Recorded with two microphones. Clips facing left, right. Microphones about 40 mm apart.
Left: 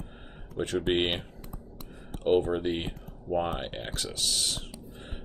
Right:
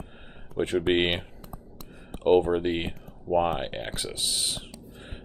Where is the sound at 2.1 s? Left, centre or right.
Centre.